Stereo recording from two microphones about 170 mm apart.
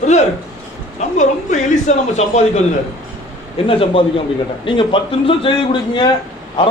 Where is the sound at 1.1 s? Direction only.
45° left (ahead or behind).